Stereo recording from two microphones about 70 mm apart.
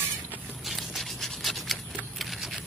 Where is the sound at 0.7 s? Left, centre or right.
Centre.